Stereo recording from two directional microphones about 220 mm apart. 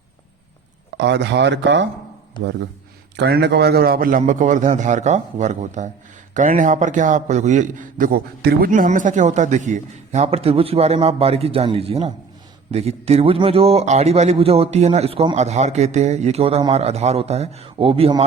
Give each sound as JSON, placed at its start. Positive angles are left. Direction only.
{"t": 0.9, "sound": "speech", "side_deg": -55}
{"t": 3.2, "sound": "a man's voice", "side_deg": -50}